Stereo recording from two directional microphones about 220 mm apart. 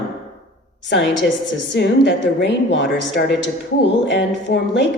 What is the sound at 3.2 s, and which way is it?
Speech, 45° left (ahead or behind).